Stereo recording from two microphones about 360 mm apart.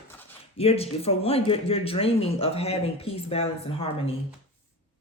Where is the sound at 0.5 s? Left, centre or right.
Centre.